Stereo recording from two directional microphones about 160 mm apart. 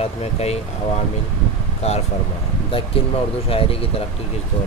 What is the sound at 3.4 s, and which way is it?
Speech, 35° left (ahead or behind).